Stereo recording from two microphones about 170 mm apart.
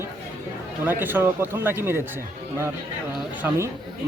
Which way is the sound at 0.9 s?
10° right (ahead or behind).